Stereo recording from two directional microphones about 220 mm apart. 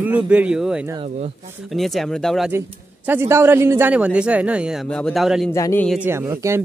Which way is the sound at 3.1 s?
10° right (ahead or behind).